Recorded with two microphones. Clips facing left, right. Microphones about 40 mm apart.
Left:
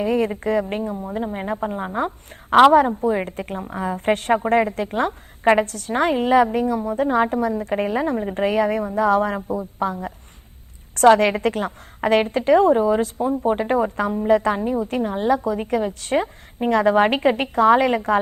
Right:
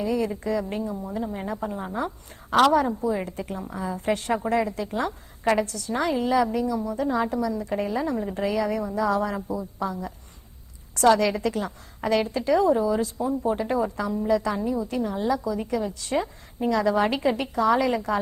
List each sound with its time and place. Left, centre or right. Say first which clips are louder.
0.0 s a woman's voice: left 5 dB; left